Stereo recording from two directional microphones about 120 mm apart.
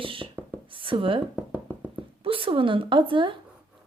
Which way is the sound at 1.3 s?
10° right (ahead or behind).